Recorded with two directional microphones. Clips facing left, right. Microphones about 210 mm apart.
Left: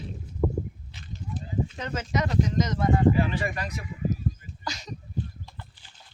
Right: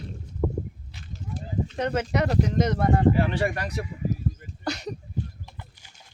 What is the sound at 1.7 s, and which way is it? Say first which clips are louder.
Speech: right 9 dB; 65° right (ahead or behind).